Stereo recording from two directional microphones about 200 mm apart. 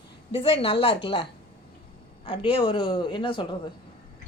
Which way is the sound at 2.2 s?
25° left (ahead or behind).